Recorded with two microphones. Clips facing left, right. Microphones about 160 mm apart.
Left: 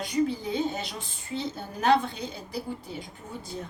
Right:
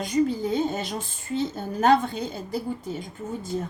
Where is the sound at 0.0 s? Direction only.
45° right (ahead or behind).